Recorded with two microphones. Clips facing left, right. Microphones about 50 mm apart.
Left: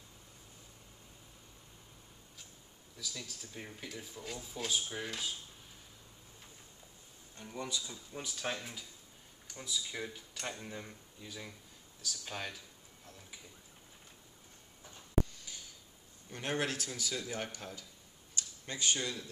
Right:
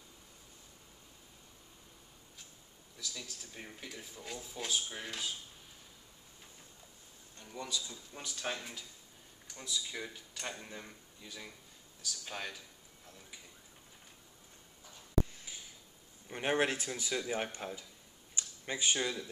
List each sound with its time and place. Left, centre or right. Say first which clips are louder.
3.0 s speech: even; centre
7.3 s speech: left 1 dB; centre
8.1 s speech: left 1 dB; centre
15.3 s a sound: right 1 dB; centre
16.3 s speech: right 4 dB; right